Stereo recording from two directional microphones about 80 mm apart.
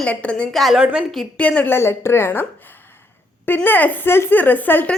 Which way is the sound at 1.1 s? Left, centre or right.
Centre.